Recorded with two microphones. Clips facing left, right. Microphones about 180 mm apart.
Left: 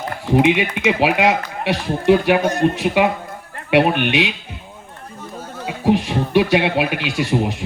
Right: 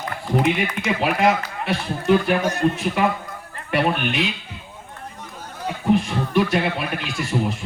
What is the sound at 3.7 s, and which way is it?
Speech, 80° left.